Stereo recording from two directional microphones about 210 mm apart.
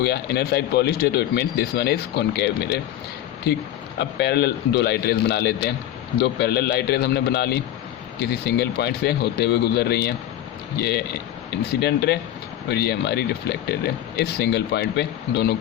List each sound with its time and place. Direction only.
0.0 s speech: 50° left (ahead or behind)
3.9 s speech: 50° left (ahead or behind)